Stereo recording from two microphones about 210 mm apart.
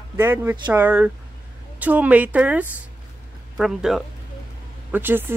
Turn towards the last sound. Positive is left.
turn(degrees=-10)  # may be behind; listen again after turning